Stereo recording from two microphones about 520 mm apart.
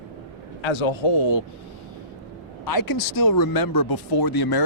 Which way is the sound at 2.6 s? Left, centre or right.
Left.